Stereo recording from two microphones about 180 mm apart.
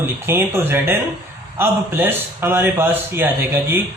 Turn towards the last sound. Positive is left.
turn(degrees=-10)  # may be behind; listen again after turning